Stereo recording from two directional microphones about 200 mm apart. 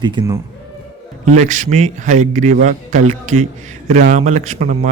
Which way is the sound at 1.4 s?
40° right (ahead or behind).